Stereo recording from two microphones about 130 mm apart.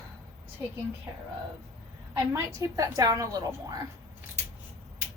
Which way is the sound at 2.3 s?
25° right (ahead or behind).